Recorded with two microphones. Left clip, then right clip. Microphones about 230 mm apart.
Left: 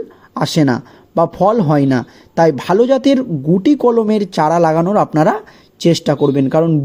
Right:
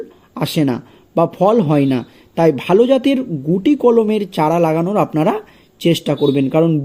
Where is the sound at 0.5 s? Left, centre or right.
Left.